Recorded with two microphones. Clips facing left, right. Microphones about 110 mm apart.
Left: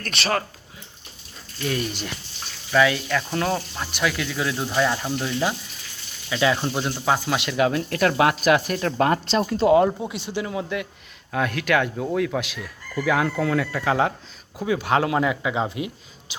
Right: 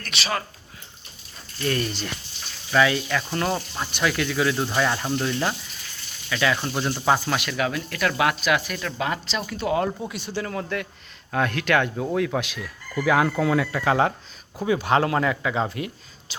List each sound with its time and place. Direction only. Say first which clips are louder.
0.0 s speech: left 3 dB; 45° left (ahead or behind)
1.6 s speech: right 1 dB; 10° left (ahead or behind)
2.7 s speech: left 1 dB; centre (ahead or behind)
6.2 s speech: left 2 dB; 20° left (ahead or behind)
6.9 s speech: right 3 dB; centre (ahead or behind)
7.3 s speech: left 4 dB; 25° left (ahead or behind)
8.4 s speech: left 5 dB; 40° left (ahead or behind)
9.5 s speech: left 7 dB; 30° left (ahead or behind)